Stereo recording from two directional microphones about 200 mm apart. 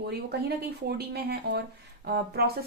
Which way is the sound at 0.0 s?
55° right (ahead or behind).